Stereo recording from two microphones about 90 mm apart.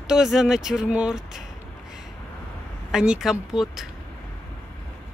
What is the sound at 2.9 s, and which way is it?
Speech, 5° right (ahead or behind).